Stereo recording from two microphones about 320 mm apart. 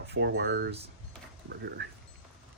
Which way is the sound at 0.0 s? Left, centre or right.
Right.